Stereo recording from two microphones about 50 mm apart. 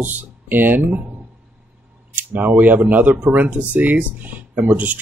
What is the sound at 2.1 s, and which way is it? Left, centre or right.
Speech, right.